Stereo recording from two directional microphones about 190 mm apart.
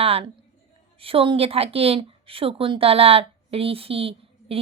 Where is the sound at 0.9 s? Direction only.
30° right (ahead or behind).